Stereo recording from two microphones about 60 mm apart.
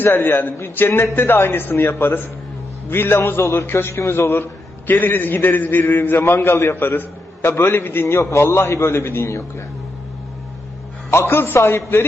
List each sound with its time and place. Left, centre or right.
0.0 s a man's voice: left
4.9 s a man's voice: left
8.0 s a man's voice: left
11.1 s a man's voice: left